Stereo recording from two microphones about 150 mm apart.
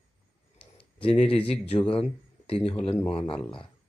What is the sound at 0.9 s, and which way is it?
Speech, 35° left (ahead or behind).